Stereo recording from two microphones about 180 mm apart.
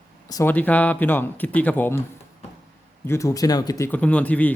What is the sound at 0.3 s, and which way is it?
Speech, 20° left (ahead or behind).